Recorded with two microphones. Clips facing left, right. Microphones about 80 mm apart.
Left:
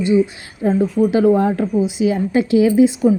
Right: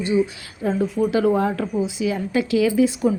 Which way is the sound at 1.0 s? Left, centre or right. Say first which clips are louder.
Left 4 dB; left.